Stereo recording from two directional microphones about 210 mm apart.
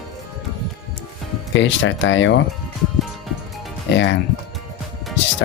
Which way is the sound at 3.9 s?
55° left (ahead or behind).